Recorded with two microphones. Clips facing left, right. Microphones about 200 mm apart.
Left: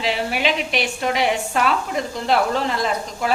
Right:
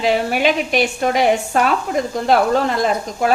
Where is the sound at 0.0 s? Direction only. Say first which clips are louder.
Right 5 dB; 45° right (ahead or behind).